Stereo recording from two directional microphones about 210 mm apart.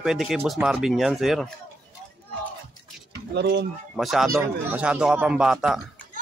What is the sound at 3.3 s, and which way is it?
Speech, 55° right (ahead or behind).